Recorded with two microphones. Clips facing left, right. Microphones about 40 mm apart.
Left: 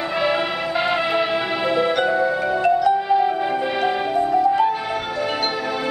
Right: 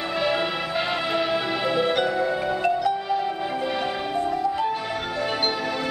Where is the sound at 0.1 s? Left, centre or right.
Centre.